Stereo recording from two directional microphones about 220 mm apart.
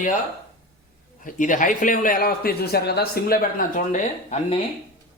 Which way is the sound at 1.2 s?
35° left (ahead or behind).